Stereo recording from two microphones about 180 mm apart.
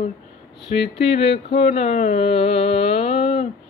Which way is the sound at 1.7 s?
40° left (ahead or behind).